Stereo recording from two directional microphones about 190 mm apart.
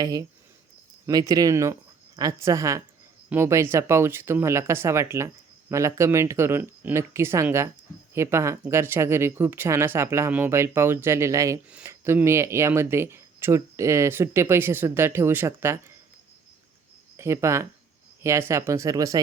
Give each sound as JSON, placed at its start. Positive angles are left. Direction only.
{"t": 0.0, "sound": "speech", "side_deg": -20}
{"t": 17.2, "sound": "speech", "side_deg": -15}